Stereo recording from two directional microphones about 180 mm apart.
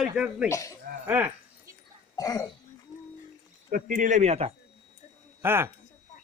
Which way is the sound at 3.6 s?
50° right (ahead or behind).